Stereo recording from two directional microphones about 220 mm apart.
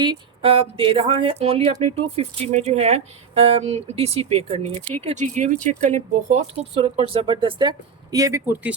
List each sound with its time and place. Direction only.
0.0 s speech: 20° right (ahead or behind)